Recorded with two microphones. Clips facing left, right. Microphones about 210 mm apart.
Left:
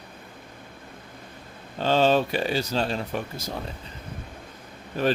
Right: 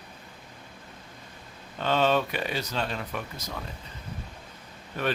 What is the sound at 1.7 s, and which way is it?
A man's voice, 30° left (ahead or behind).